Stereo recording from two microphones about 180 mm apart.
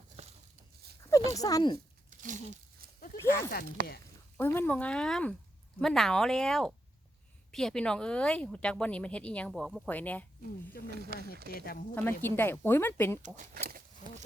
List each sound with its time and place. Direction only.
0.2 s a sound: 35° right (ahead or behind)
1.3 s speech: 20° left (ahead or behind)
2.0 s speech: 45° right (ahead or behind)
3.0 s a sound: 50° left (ahead or behind)
3.8 s speech: 55° right (ahead or behind)
4.4 s a woman's voice: 10° left (ahead or behind)
10.9 s speech: 65° right (ahead or behind)
11.5 s speech: 55° left (ahead or behind)
12.2 s a woman's voice: 10° left (ahead or behind)
13.2 s speech: 45° right (ahead or behind)